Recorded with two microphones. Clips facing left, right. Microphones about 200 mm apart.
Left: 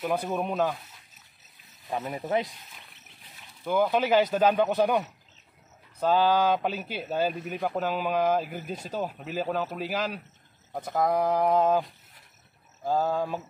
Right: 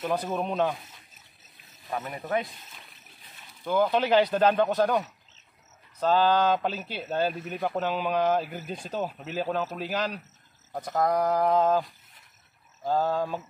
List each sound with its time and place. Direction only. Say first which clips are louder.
0.1 s speech: right 1 dB; 10° left (ahead or behind)
1.7 s speech: left 2 dB; 20° left (ahead or behind)
3.6 s speech: even; 5° left (ahead or behind)
12.8 s speech: even; 10° left (ahead or behind)